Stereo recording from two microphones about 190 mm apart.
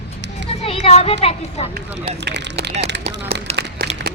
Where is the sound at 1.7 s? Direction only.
60° right (ahead or behind).